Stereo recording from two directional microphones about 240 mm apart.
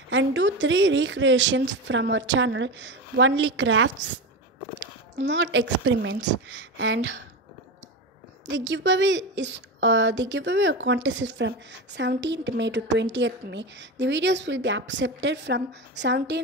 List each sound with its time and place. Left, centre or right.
0.1 s a woman's voice: right
5.2 s a woman's voice: right
8.5 s a woman's voice: right